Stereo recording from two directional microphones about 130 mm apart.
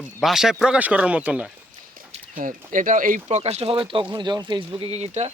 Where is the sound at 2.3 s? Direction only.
85° right.